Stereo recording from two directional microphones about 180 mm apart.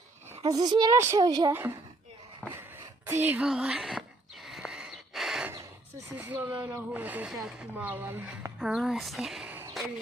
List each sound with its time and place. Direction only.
0.4 s a child's voice: 20° right (ahead or behind)
2.4 s a sound: 10° left (ahead or behind)
3.1 s speech: 10° right (ahead or behind)
4.4 s a sound: centre (ahead or behind)
6.1 s speech: 10° right (ahead or behind)
8.5 s speech: centre (ahead or behind)